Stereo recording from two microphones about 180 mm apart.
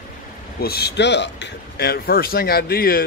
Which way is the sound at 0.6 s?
60° left (ahead or behind).